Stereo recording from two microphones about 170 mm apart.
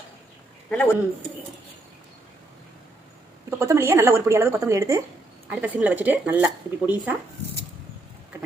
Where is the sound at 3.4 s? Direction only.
15° right (ahead or behind).